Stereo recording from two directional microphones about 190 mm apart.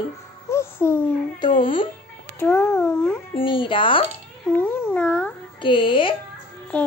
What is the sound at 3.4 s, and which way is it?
Speech, 25° left (ahead or behind).